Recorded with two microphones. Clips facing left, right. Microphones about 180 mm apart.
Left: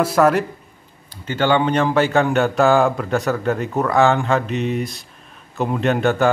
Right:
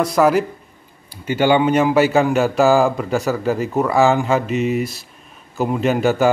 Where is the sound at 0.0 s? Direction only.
Centre (ahead or behind).